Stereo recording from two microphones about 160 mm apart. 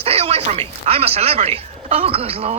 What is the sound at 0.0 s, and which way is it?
Speech, 40° right (ahead or behind).